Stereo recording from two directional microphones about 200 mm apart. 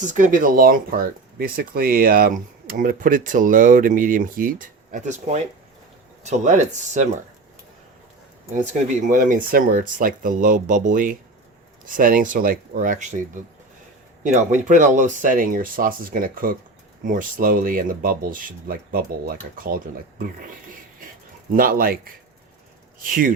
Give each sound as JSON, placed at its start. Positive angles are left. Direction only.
{"t": 0.0, "sound": "speech", "side_deg": -40}
{"t": 8.5, "sound": "speech", "side_deg": -40}
{"t": 14.3, "sound": "speech", "side_deg": -35}
{"t": 21.5, "sound": "speech", "side_deg": -45}